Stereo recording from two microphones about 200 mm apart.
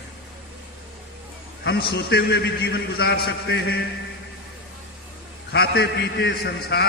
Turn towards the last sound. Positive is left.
turn(degrees=55)  # may be behind; listen again after turning